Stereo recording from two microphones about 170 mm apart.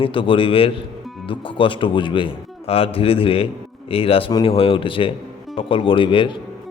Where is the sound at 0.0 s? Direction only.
30° left (ahead or behind).